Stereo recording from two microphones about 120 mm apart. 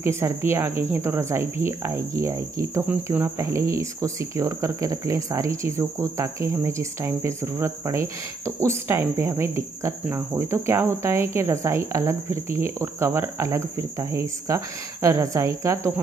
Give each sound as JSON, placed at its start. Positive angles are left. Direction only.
{"t": 0.0, "sound": "speech", "side_deg": -20}